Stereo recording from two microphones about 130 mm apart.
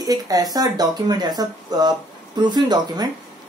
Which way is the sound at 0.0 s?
30° right (ahead or behind).